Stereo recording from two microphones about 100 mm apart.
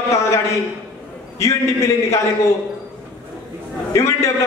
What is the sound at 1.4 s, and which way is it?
Speech, 30° left (ahead or behind).